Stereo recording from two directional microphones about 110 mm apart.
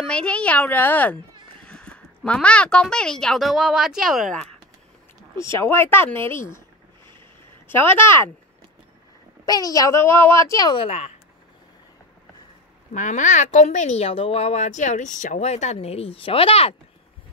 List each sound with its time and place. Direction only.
0.0 s a woman's voice: 10° left (ahead or behind)
5.3 s speech: 25° left (ahead or behind)
7.6 s speech: 20° left (ahead or behind)
9.5 s speech: 35° left (ahead or behind)
10.8 s speech: 70° left (ahead or behind)
13.1 s speech: 90° left; by 16.7 s 60° left (ahead or behind)